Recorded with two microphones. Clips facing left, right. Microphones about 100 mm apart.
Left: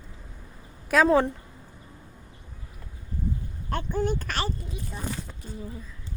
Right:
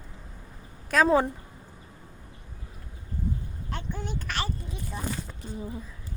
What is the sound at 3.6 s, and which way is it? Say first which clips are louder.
Speech: left 9 dB; 50° left (ahead or behind).